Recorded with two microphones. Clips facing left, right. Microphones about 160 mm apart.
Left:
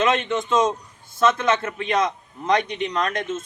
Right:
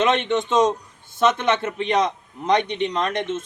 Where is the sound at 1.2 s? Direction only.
25° right (ahead or behind).